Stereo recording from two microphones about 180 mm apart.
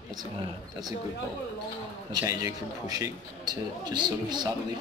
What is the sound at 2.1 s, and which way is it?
A man's voice, 20° right (ahead or behind).